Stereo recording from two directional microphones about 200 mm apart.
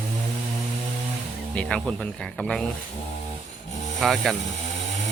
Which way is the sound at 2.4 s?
Centre (ahead or behind).